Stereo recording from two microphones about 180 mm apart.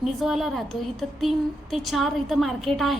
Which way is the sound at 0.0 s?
Centre (ahead or behind).